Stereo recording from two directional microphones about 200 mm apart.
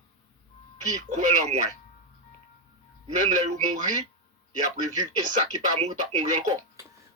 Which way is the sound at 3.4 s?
35° right (ahead or behind).